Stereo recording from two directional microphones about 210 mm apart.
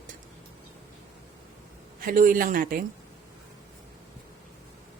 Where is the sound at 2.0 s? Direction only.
40° right (ahead or behind).